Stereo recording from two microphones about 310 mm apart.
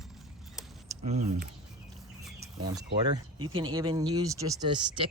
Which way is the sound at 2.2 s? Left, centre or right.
Centre.